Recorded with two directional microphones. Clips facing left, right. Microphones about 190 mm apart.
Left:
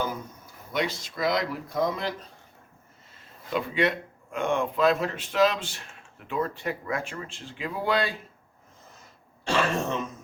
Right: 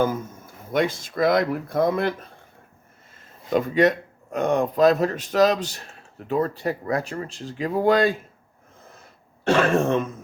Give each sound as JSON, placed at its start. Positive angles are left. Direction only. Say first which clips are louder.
{"t": 0.0, "sound": "speech", "louder": "right 8 dB", "side_deg": -50}
{"t": 3.5, "sound": "speech", "louder": "right 7 dB", "side_deg": -45}
{"t": 9.4, "sound": "speech", "louder": "right 7 dB", "side_deg": -55}